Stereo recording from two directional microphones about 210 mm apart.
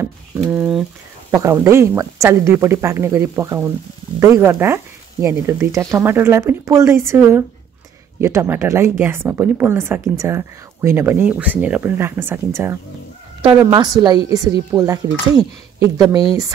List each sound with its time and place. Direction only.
0.5 s speech: centre (ahead or behind)
1.3 s a woman's voice: 15° right (ahead or behind)